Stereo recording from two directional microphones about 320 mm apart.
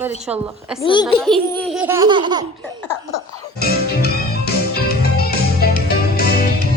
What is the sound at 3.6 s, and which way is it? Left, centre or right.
Music, left.